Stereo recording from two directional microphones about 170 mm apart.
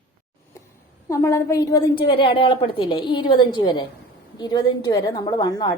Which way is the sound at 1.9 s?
30° left (ahead or behind).